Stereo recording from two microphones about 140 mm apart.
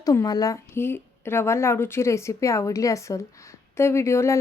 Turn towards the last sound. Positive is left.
turn(degrees=20)  # may be behind; listen again after turning